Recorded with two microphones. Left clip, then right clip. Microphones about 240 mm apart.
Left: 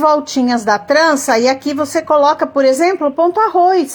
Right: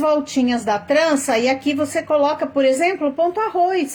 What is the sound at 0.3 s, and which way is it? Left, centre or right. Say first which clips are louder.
Speech: left 5 dB; left.